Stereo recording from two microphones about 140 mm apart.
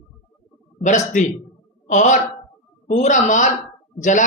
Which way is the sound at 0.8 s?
60° left (ahead or behind).